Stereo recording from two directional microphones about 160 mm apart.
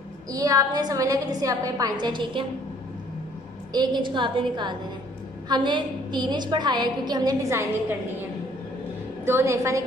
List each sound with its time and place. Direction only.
0.3 s a woman's voice: 20° right (ahead or behind)
3.7 s a woman's voice: 25° right (ahead or behind)
9.2 s a woman's voice: 15° right (ahead or behind)